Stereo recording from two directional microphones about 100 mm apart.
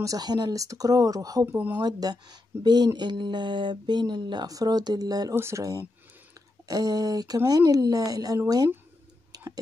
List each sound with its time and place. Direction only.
0.0 s speech: 40° right (ahead or behind)
1.4 s speech: 20° right (ahead or behind)
1.8 s speech: 40° right (ahead or behind)
5.3 s speech: 25° right (ahead or behind)
6.7 s speech: 40° right (ahead or behind)
9.3 s clicking: 40° right (ahead or behind)